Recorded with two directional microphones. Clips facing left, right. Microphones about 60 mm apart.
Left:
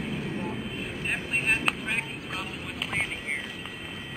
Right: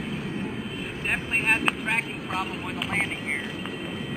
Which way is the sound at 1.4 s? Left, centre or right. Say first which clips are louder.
Right 4 dB; right.